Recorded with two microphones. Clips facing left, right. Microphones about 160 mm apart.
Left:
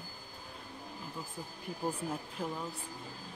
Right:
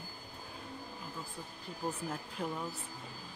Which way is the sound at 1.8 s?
5° left (ahead or behind).